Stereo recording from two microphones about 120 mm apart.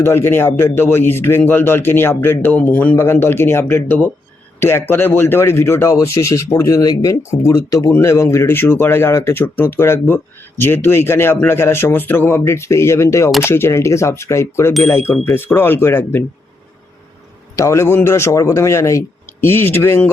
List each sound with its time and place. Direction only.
0.0 s speech: 20° left (ahead or behind)
17.6 s speech: 25° left (ahead or behind)